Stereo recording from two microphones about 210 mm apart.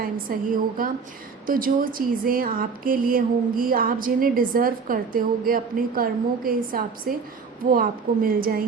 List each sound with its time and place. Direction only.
0.3 s a woman's voice: 40° right (ahead or behind)
1.5 s speech: 40° right (ahead or behind)